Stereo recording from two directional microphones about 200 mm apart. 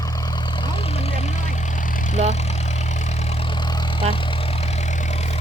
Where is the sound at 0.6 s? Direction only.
30° left (ahead or behind).